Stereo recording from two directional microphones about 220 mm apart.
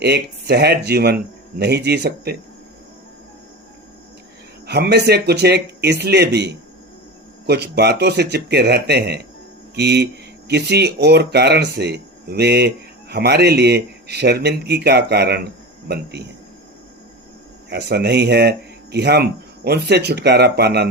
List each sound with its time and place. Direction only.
0.0 s speech: 50° right (ahead or behind)
4.6 s speech: 50° right (ahead or behind)
17.7 s speech: 50° right (ahead or behind)